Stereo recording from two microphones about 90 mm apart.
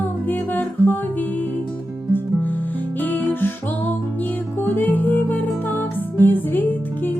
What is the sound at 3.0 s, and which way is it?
Music, 20° left (ahead or behind).